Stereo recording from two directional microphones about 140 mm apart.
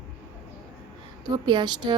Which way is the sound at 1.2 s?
30° right (ahead or behind).